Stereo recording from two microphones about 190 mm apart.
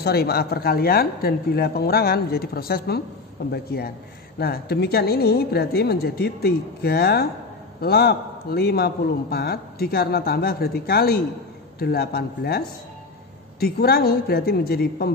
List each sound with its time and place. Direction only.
0.0 s a man's voice: 55° left (ahead or behind)